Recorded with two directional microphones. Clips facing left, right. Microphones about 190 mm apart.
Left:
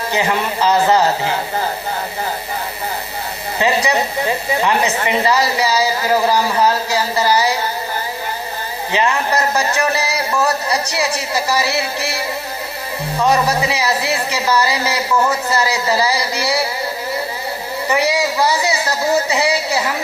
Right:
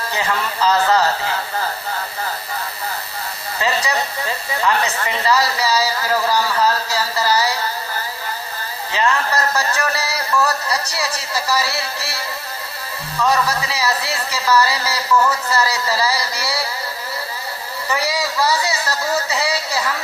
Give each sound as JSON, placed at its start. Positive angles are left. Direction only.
{"t": 0.1, "sound": "speech", "side_deg": 20}
{"t": 3.6, "sound": "speech", "side_deg": 20}
{"t": 8.9, "sound": "speech", "side_deg": 15}
{"t": 17.8, "sound": "speech", "side_deg": 20}